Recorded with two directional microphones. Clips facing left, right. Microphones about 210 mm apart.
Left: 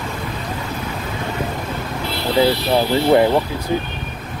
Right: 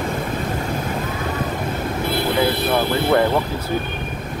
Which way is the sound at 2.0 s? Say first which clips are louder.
Left 3 dB; 50° right (ahead or behind).